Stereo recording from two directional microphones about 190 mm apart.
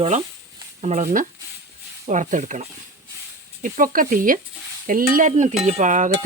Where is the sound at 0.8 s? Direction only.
40° right (ahead or behind).